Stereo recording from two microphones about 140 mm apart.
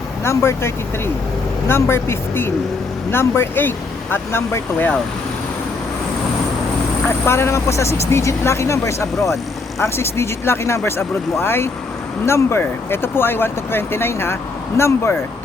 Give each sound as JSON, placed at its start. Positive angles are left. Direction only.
{"t": 0.3, "sound": "speech", "side_deg": 20}
{"t": 7.3, "sound": "speech", "side_deg": 20}